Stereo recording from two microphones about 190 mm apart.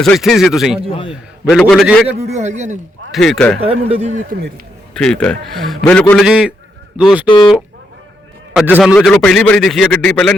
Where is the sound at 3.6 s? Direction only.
30° right (ahead or behind).